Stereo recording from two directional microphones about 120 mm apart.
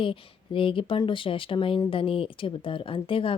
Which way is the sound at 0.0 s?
45° left (ahead or behind).